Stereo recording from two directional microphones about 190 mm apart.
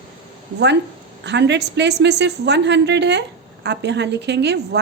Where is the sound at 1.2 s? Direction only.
65° right (ahead or behind).